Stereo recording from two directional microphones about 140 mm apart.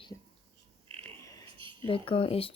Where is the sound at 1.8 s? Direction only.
40° left (ahead or behind).